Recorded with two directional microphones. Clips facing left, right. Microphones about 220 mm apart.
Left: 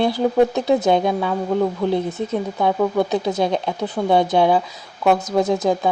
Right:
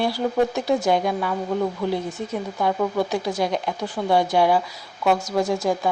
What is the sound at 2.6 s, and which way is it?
Speech, 20° left (ahead or behind).